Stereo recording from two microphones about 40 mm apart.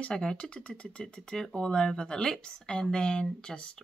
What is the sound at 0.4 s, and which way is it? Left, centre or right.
Speech, left.